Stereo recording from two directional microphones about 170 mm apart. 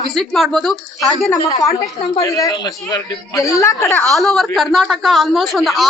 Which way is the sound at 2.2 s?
20° left (ahead or behind).